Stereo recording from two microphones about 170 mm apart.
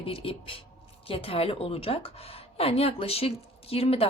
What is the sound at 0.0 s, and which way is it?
Speech, 30° left (ahead or behind).